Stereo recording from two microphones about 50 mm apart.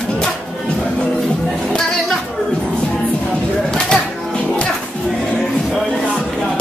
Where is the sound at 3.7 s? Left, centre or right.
Centre.